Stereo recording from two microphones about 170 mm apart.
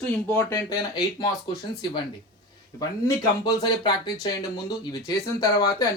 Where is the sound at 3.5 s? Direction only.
25° left (ahead or behind).